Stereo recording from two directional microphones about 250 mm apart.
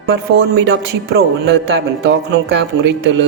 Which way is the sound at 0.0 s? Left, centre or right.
Right.